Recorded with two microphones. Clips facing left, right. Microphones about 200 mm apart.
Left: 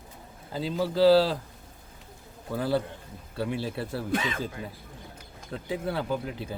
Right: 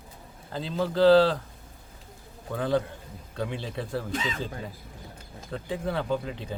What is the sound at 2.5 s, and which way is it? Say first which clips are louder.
Speech: right 1 dB; 5° left (ahead or behind).